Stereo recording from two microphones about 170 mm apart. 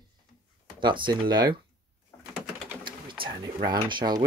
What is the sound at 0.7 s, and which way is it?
Speech, 30° right (ahead or behind).